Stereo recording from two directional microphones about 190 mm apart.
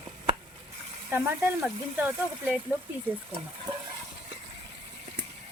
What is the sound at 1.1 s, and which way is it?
Speech, 10° right (ahead or behind).